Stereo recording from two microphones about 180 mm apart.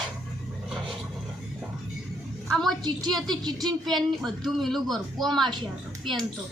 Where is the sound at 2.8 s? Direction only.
25° right (ahead or behind).